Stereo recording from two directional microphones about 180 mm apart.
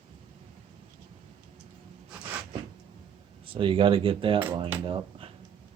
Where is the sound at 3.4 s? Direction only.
30° right (ahead or behind).